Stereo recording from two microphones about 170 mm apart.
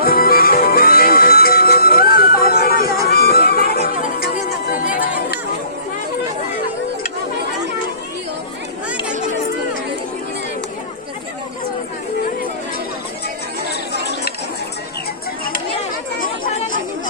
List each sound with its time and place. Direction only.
0.0 s music: 60° left (ahead or behind)
13.9 s a sound: 75° left (ahead or behind)
16.2 s chatter: 55° left (ahead or behind)